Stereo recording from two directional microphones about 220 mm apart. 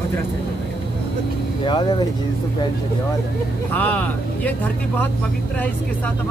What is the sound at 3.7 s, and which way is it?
Speech, 10° left (ahead or behind).